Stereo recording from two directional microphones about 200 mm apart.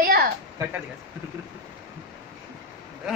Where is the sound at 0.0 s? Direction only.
50° right (ahead or behind).